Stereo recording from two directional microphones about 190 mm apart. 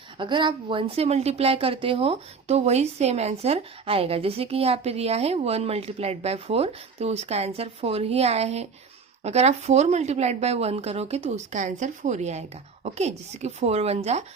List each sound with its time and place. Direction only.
0.2 s a woman's voice: 25° right (ahead or behind)